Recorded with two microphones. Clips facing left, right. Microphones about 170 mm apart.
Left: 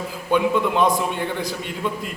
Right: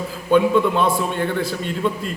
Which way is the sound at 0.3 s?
15° left (ahead or behind).